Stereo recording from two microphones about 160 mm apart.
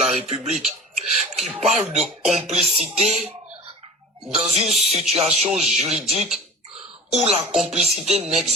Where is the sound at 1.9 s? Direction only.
45° right (ahead or behind).